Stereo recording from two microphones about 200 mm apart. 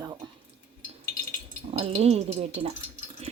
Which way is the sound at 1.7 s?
30° right (ahead or behind).